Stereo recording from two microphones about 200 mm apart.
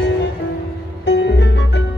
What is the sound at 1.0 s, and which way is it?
Music, 60° left (ahead or behind).